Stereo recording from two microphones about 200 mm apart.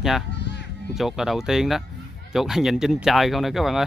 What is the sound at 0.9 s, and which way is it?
Speech, centre (ahead or behind).